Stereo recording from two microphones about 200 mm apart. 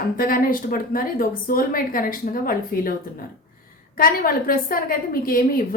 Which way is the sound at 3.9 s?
45° left (ahead or behind).